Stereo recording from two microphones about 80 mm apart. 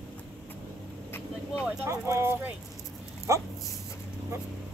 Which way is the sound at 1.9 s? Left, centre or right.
Right.